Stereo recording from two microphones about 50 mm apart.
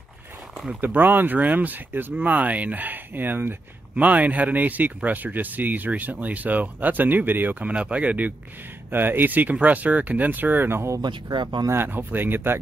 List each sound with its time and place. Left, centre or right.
0.7 s speech: right
3.9 s speech: right
7.6 s speech: right
8.9 s speech: right